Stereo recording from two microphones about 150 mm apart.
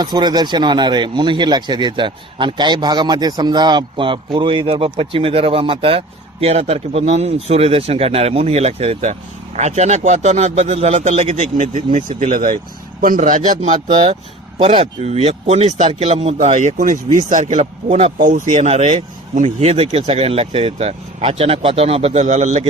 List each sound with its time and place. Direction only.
0.0 s a man's voice: 30° right (ahead or behind); by 13.7 s 55° right (ahead or behind)
14.6 s speech: 40° right (ahead or behind)
18.1 s a man's voice: 60° right (ahead or behind)
18.5 s speech: 45° right (ahead or behind)